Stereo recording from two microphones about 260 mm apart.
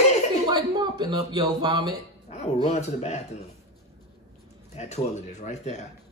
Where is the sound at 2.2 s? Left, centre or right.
Left.